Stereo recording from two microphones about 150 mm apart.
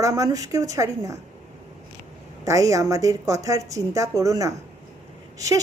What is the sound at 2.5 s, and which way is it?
A woman's voice, 20° right (ahead or behind).